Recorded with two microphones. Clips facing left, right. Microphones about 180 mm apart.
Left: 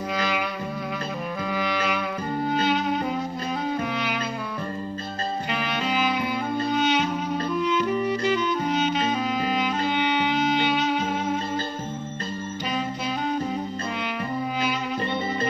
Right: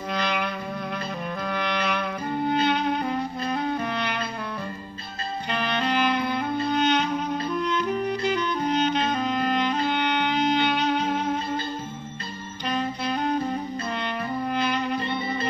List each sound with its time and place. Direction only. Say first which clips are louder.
0.1 s music: right 1 dB; 5° left (ahead or behind)
1.5 s music: left 1 dB; 5° left (ahead or behind)
5.5 s clarinet: right 4 dB; 5° left (ahead or behind)
12.6 s music: right 2 dB; 5° left (ahead or behind)
14.6 s music: right 1 dB; 5° left (ahead or behind)